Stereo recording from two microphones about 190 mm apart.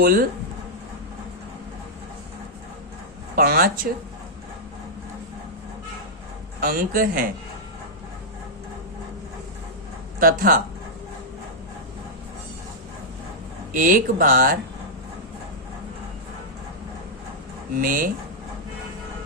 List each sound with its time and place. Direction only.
0.0 s speech: 50° right (ahead or behind)
3.3 s speech: 50° right (ahead or behind)
6.6 s speech: 50° right (ahead or behind)
10.2 s speech: 50° right (ahead or behind)
13.7 s speech: 45° right (ahead or behind)
17.7 s speech: 45° right (ahead or behind)